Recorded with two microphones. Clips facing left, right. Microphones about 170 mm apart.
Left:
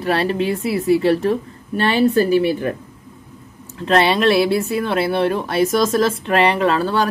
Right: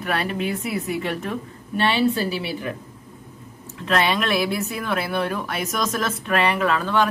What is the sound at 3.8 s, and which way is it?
A woman's voice, 30° left (ahead or behind).